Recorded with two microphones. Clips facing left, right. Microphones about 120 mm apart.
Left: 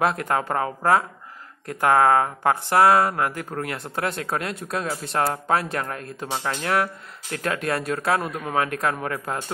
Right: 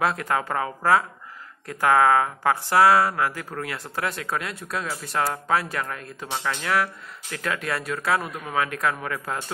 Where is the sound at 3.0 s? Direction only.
45° left (ahead or behind).